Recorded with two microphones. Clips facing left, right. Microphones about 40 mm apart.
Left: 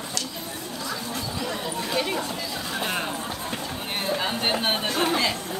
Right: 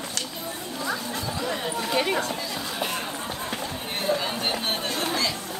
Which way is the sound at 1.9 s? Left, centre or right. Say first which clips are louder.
Right 2 dB; centre.